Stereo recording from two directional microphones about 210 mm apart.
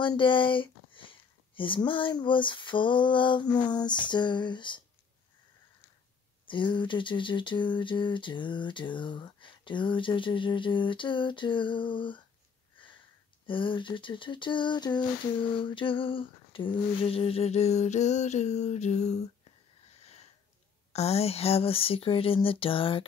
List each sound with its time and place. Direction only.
0.0 s speech: 25° left (ahead or behind)
6.4 s speech: 25° left (ahead or behind)
12.8 s sniff: 25° left (ahead or behind)
13.5 s speech: 25° left (ahead or behind)
20.0 s sniff: 30° left (ahead or behind)
20.9 s speech: 30° left (ahead or behind)